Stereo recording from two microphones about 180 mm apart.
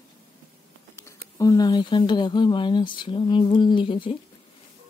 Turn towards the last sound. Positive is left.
turn(degrees=30)  # may be behind; listen again after turning